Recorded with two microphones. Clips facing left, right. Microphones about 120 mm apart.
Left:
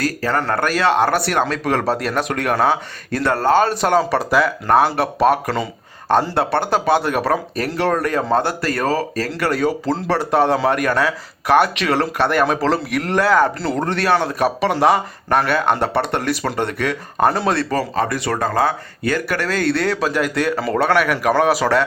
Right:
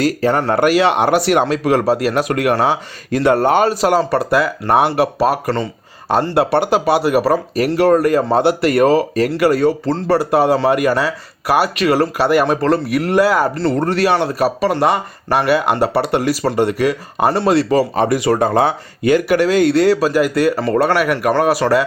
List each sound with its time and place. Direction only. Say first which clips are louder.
0.3 s speech: right 5 dB; 25° right (ahead or behind)
9.3 s speech: right 5 dB; centre (ahead or behind)
17.7 s speech: right 6 dB; 15° right (ahead or behind)
20.0 s speech: right 5 dB; 5° right (ahead or behind)